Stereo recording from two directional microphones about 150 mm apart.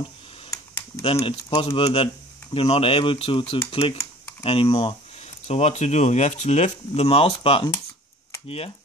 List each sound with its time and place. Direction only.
0.5 s computer keyboard: 20° left (ahead or behind)
1.0 s speech: 40° left (ahead or behind)